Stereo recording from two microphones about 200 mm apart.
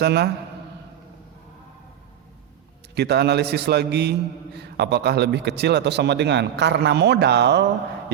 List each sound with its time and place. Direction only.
0.0 s speech: 55° right (ahead or behind)
2.9 s speech: 55° right (ahead or behind)